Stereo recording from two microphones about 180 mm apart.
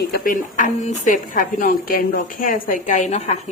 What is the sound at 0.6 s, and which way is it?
A woman's voice, 45° left (ahead or behind).